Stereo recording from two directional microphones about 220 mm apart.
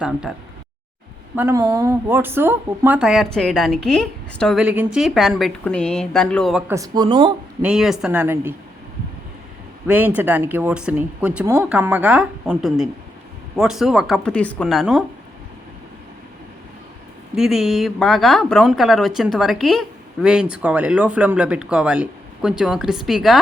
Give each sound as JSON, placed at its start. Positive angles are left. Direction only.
{"t": 0.0, "sound": "speech", "side_deg": -5}
{"t": 1.4, "sound": "speech", "side_deg": -10}
{"t": 6.7, "sound": "speech", "side_deg": -15}
{"t": 7.6, "sound": "speech", "side_deg": -5}
{"t": 9.8, "sound": "speech", "side_deg": -10}
{"t": 17.3, "sound": "speech", "side_deg": 0}